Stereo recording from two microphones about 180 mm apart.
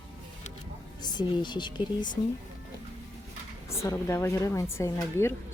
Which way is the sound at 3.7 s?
15° left (ahead or behind).